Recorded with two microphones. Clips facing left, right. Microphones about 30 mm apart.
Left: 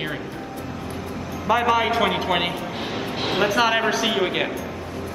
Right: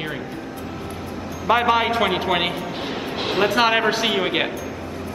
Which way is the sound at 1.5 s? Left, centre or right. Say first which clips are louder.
Right 2 dB; right.